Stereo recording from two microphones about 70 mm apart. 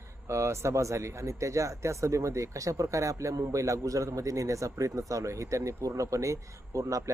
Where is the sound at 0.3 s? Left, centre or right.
Right.